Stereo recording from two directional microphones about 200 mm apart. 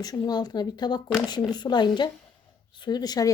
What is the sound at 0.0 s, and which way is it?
Speech, 20° left (ahead or behind).